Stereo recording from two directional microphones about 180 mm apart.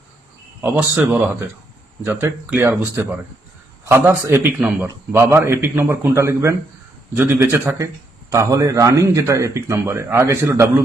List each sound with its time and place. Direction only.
0.6 s a man's voice: 5° right (ahead or behind)